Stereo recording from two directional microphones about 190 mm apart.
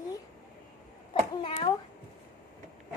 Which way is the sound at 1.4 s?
30° left (ahead or behind).